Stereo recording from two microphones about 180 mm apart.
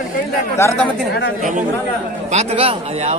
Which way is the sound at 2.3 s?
35° right (ahead or behind).